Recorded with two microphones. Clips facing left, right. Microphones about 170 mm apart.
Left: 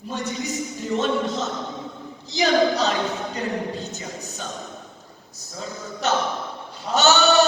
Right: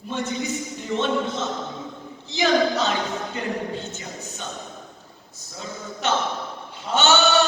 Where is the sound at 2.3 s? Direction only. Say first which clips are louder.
Left 1 dB; 40° left (ahead or behind).